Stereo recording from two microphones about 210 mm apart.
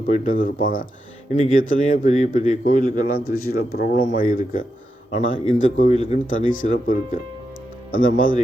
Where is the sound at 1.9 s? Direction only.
35° left (ahead or behind).